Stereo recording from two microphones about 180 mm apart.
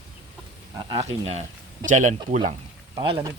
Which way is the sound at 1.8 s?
45° right (ahead or behind).